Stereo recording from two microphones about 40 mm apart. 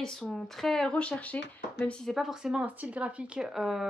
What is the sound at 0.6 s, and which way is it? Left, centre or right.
Speech, centre.